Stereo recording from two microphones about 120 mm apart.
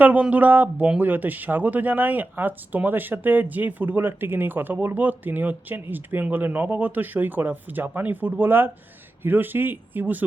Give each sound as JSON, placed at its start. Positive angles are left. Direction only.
{"t": 0.0, "sound": "speech", "side_deg": -10}